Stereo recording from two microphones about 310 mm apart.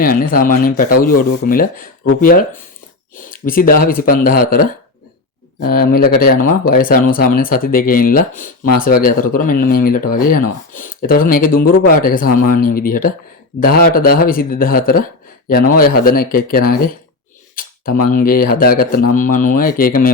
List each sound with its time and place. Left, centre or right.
0.0 s speech: left
17.5 s a sound: left
18.1 s speech: left